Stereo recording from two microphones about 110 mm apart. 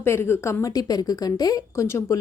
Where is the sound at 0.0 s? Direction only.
20° left (ahead or behind).